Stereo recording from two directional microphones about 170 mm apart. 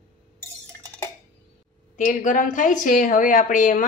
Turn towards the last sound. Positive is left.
turn(degrees=50)  # may be behind; listen again after turning